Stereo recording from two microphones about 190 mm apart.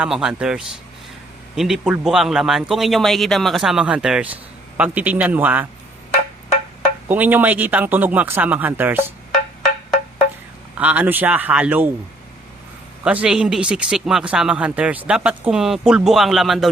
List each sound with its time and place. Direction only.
0.0 s speech: 5° right (ahead or behind)
7.1 s speech: 10° right (ahead or behind)
10.8 s speech: 5° right (ahead or behind)
13.2 s speech: 5° right (ahead or behind)